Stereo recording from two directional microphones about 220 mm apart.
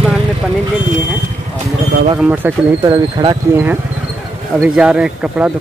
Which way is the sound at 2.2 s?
5° right (ahead or behind).